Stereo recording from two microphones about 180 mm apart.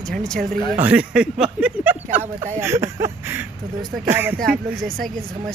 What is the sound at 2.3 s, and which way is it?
Speech, 45° right (ahead or behind).